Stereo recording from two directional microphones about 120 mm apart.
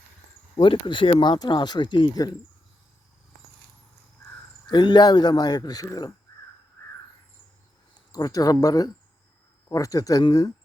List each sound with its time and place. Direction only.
0.5 s speech: 45° left (ahead or behind)
4.7 s speech: 40° left (ahead or behind)
8.1 s speech: 30° left (ahead or behind)